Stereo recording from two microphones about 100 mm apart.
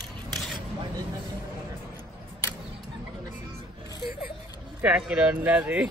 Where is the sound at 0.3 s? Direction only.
5° left (ahead or behind).